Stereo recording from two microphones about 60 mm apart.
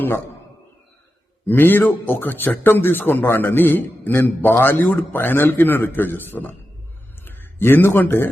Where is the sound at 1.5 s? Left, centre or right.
Left.